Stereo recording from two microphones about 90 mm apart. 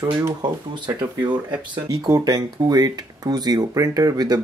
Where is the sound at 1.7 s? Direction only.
45° right (ahead or behind).